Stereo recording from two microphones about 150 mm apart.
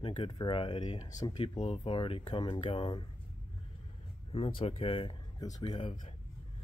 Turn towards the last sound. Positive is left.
turn(degrees=35)  # may be behind; listen again after turning